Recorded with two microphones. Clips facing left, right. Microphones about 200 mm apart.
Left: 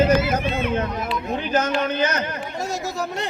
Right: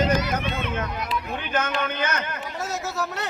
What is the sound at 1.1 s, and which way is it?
A man's voice, 30° left (ahead or behind).